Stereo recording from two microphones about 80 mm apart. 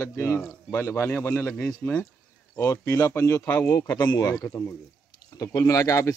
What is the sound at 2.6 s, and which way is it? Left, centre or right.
Speech, left.